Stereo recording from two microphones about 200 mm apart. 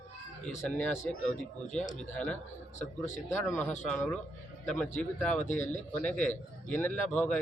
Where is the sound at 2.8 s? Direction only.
35° left (ahead or behind).